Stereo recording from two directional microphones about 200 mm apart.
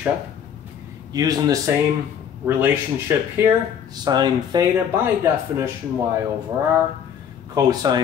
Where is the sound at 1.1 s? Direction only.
20° right (ahead or behind).